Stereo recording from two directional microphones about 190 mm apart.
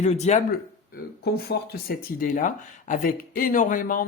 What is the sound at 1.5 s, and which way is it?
Speech, 60° left (ahead or behind).